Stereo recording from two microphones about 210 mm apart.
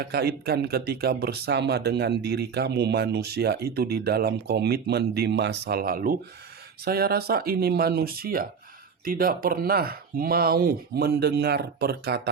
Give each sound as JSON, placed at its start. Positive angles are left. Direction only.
{"t": 0.0, "sound": "speech", "side_deg": -50}